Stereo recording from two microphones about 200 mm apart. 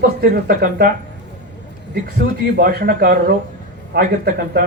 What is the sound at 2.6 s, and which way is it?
A man's voice, 50° right (ahead or behind).